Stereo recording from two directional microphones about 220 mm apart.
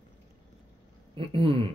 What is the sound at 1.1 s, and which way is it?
Speech, 25° right (ahead or behind).